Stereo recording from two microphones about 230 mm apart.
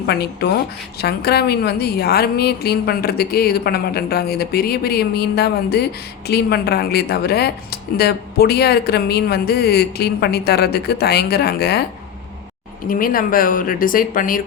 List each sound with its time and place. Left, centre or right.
0.0 s speech: left
12.9 s a woman's voice: left